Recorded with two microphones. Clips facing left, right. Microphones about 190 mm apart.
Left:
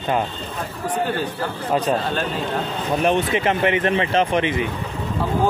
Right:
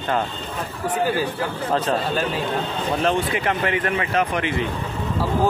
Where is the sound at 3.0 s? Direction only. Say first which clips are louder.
Left 4 dB; 20° left (ahead or behind).